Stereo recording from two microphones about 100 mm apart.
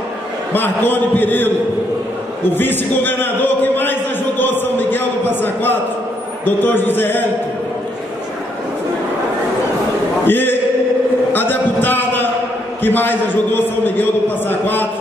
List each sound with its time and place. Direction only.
0.5 s speech: 20° left (ahead or behind)
2.5 s speech: 20° left (ahead or behind)
10.2 s a man's voice: 20° left (ahead or behind)
11.3 s a sound: 20° left (ahead or behind)
12.8 s speech: 20° left (ahead or behind)